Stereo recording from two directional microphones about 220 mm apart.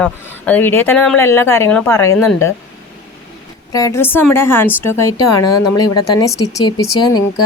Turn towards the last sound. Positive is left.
turn(degrees=20)  # may be behind; listen again after turning